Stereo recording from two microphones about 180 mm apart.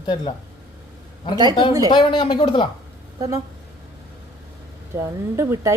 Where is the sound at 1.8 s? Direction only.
25° left (ahead or behind).